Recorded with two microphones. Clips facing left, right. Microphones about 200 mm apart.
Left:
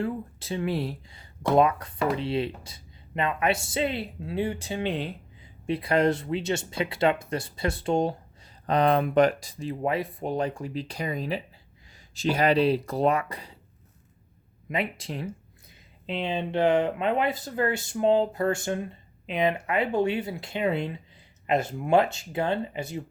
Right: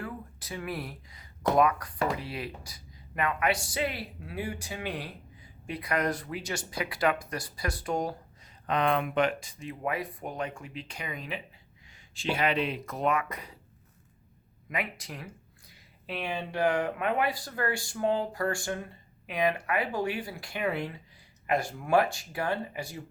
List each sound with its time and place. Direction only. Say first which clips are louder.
0.0 s speech: left 9 dB; 25° left (ahead or behind)
8.6 s speech: left 5 dB; 35° left (ahead or behind)
14.7 s speech: left 5 dB; 25° left (ahead or behind)